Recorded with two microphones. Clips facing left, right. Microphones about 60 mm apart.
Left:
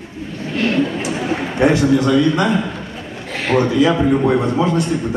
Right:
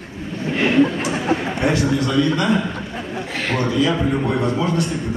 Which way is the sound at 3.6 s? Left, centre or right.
Left.